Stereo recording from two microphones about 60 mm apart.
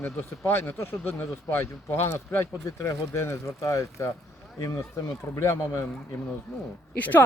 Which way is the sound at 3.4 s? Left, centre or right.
Left.